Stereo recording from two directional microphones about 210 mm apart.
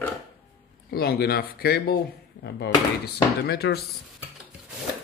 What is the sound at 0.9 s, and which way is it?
Speech, 50° left (ahead or behind).